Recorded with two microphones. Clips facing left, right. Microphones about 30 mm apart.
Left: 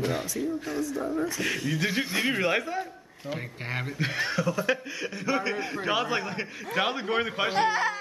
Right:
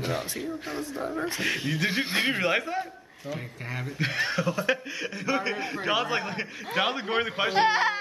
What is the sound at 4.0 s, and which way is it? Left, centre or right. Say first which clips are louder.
A man's voice: right 2 dB; centre.